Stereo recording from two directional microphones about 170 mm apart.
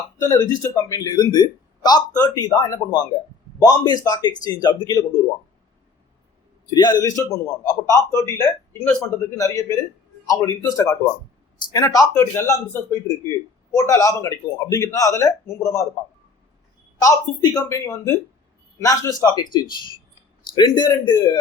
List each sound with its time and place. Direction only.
0.2 s speech: 15° left (ahead or behind)
6.7 s speech: 25° left (ahead or behind)
17.0 s speech: 20° left (ahead or behind)
20.6 s speech: 25° left (ahead or behind)